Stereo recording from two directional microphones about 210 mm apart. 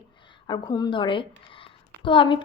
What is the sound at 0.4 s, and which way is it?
A woman's voice, 20° left (ahead or behind).